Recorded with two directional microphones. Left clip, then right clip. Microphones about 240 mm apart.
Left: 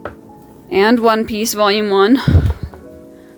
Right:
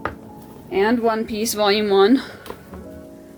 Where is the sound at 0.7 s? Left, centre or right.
Left.